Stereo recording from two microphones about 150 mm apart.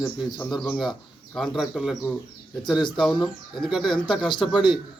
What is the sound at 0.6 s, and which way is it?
A man's voice, centre (ahead or behind).